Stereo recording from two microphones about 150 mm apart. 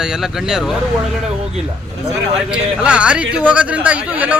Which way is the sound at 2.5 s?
5° right (ahead or behind).